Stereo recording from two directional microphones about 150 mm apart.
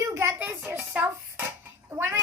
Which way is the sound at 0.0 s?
20° right (ahead or behind).